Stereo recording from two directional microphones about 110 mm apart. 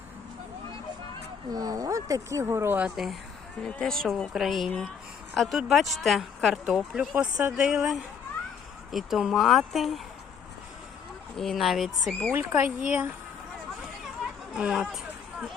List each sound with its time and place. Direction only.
1.5 s speech: 35° right (ahead or behind); by 2.9 s 15° right (ahead or behind)
2.9 s speech: centre (ahead or behind)
11.3 s speech: centre (ahead or behind)
12.3 s speech: 20° right (ahead or behind)
14.5 s speech: 5° right (ahead or behind)